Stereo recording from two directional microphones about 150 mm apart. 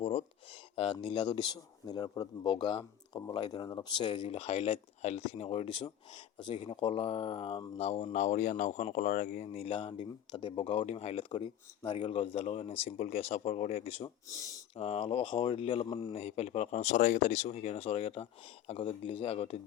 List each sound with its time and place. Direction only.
0.0 s speech: 40° left (ahead or behind)
14.3 s speech: 25° left (ahead or behind)
14.8 s speech: 40° left (ahead or behind)